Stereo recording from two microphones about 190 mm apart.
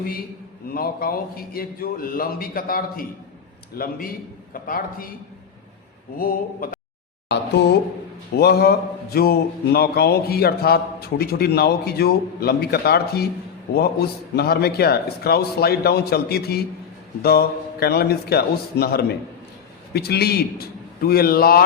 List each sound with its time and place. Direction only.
0.7 s speech: 50° left (ahead or behind)
6.1 s speech: 50° left (ahead or behind)
7.3 s speech: 60° left (ahead or behind)
14.3 s speech: 55° left (ahead or behind)